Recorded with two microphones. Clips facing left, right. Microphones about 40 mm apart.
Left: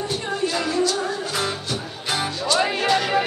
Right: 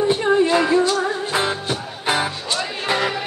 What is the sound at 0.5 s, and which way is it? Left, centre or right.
Music, right.